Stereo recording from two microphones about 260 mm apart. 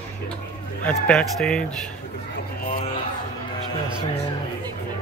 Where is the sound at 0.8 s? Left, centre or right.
Centre.